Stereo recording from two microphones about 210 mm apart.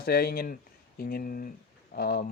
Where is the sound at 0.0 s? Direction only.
50° left (ahead or behind).